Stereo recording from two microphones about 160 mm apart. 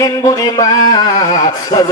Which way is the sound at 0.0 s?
20° left (ahead or behind).